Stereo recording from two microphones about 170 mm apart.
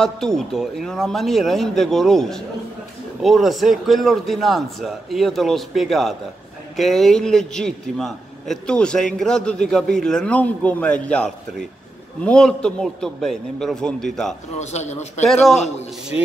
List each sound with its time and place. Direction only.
0.0 s a man's voice: 5° left (ahead or behind)
14.6 s a man's voice: 40° left (ahead or behind)
15.2 s a man's voice: centre (ahead or behind)